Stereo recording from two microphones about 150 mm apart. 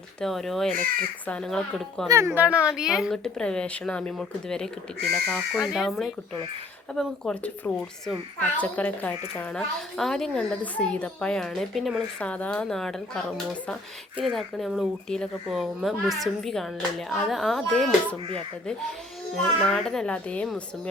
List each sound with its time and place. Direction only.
0.2 s a child's voice: centre (ahead or behind)
2.0 s a child's voice: 20° right (ahead or behind); by 18.2 s 5° left (ahead or behind)
19.4 s a child's voice: 5° left (ahead or behind)